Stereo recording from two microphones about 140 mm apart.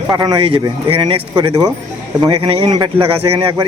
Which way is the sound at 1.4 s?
25° right (ahead or behind).